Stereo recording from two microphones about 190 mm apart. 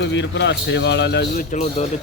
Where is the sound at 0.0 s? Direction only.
70° left (ahead or behind).